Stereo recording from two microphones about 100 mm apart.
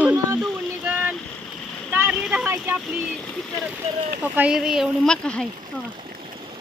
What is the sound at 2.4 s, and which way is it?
Speech, 25° right (ahead or behind).